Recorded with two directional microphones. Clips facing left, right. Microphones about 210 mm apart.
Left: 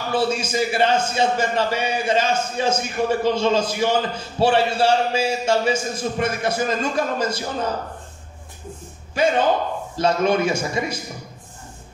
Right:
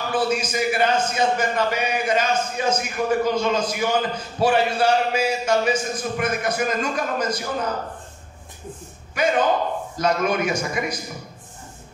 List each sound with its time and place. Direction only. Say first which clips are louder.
0.1 s a man's voice: left 2 dB; 25° left (ahead or behind)
9.2 s a man's voice: left 1 dB; 25° left (ahead or behind)